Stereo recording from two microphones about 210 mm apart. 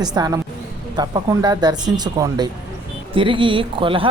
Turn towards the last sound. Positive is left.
turn(degrees=-25)  # may be behind; listen again after turning